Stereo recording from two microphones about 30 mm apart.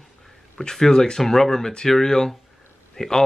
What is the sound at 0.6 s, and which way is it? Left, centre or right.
Speech, centre.